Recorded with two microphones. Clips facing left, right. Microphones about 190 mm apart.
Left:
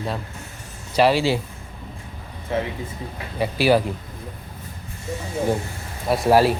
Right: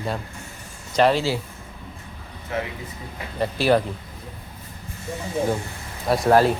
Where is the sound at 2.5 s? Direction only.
25° left (ahead or behind).